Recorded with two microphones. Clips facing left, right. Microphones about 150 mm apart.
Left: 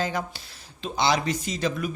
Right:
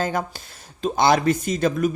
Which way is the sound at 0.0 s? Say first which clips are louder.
Right 4 dB; 50° right (ahead or behind).